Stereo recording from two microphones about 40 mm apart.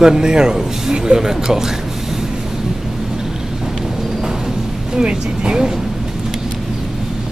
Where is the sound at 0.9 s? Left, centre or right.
Centre.